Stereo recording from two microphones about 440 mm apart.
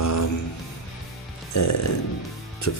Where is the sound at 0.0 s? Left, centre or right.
Left.